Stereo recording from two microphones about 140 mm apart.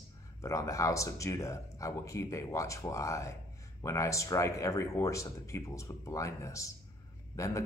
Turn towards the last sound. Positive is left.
turn(degrees=20)  # may be behind; listen again after turning